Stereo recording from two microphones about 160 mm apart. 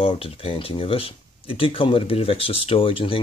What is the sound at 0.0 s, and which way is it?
Speech, 35° left (ahead or behind).